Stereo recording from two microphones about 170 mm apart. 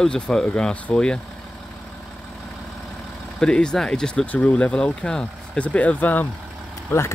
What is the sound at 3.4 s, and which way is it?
Speech, 5° left (ahead or behind).